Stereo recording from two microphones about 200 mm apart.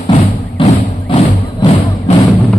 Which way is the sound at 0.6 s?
15° left (ahead or behind).